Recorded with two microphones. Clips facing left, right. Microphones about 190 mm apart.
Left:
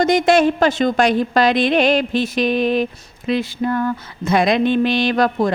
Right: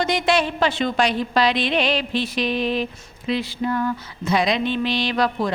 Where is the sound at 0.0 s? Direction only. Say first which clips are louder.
Left 7 dB; 45° left (ahead or behind).